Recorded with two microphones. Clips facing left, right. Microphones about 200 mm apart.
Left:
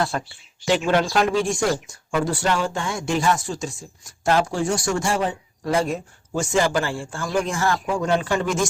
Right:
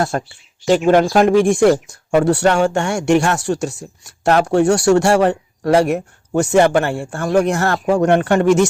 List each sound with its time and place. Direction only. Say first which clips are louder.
0.1 s speech: right 6 dB; 50° right (ahead or behind); by 8.7 s 70° right (ahead or behind)